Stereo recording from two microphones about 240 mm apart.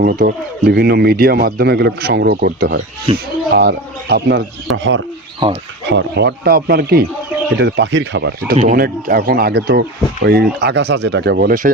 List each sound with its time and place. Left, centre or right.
0.0 s speech: right
3.1 s speech: right
3.5 s speech: right
5.4 s speech: centre
5.9 s speech: right